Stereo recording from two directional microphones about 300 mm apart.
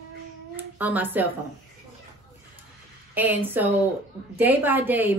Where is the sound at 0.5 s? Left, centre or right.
Centre.